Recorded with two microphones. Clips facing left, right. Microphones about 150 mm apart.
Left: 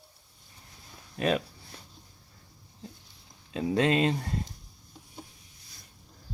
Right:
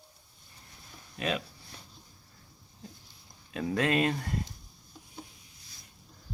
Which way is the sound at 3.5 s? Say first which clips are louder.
Left 3 dB; 25° left (ahead or behind).